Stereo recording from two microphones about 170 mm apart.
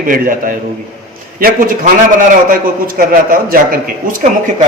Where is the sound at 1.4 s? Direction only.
55° right (ahead or behind).